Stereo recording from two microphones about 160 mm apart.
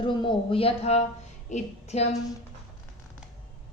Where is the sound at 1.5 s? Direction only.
40° left (ahead or behind).